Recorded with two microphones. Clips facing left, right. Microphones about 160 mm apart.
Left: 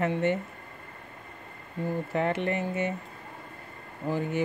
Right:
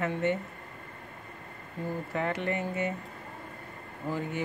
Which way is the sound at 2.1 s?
30° left (ahead or behind).